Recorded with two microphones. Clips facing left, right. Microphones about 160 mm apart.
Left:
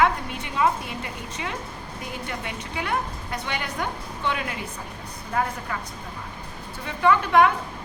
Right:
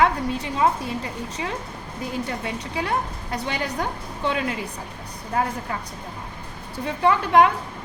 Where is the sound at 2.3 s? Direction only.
30° right (ahead or behind).